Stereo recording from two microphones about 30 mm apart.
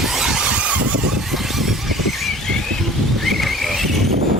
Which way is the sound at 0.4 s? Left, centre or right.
Right.